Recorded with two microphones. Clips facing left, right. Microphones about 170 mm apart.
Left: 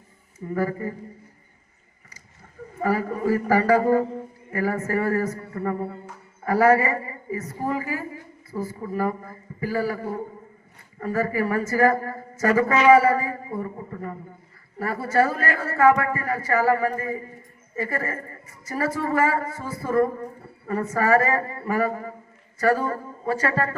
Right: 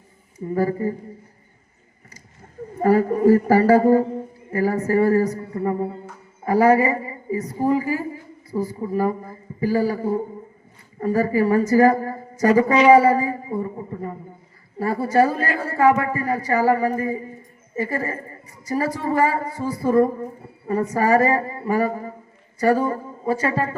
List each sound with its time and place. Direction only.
0.4 s a woman's voice: 30° right (ahead or behind)
2.7 s a woman's voice: 40° right (ahead or behind)
23.2 s a man's voice: 15° right (ahead or behind)